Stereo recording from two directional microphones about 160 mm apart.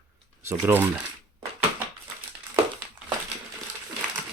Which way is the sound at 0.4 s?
15° right (ahead or behind).